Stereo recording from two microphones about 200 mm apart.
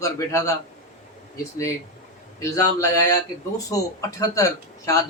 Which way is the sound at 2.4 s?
15° left (ahead or behind).